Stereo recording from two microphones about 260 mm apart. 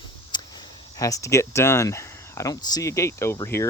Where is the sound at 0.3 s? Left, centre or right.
Centre.